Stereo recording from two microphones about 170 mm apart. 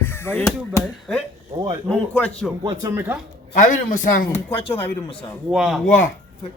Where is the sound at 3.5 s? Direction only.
50° left (ahead or behind).